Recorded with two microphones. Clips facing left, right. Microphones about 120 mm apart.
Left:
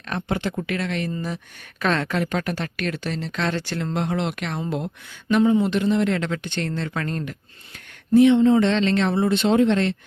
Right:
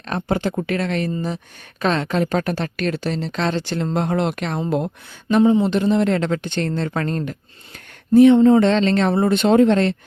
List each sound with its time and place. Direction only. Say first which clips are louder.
0.1 s speech: right 4 dB; 35° right (ahead or behind)
1.1 s speech: right 4 dB; 30° right (ahead or behind); by 4.9 s 45° right (ahead or behind)
5.3 s speech: right 3 dB; 25° right (ahead or behind); by 9.9 s 45° right (ahead or behind)